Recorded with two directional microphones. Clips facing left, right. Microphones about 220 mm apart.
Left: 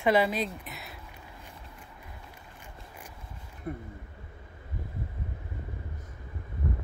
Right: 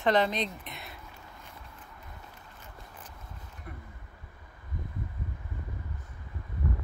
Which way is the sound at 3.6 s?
35° left (ahead or behind).